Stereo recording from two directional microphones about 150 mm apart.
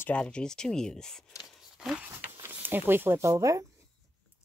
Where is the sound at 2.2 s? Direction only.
15° right (ahead or behind).